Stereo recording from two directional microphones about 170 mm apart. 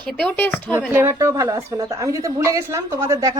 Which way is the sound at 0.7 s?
10° right (ahead or behind).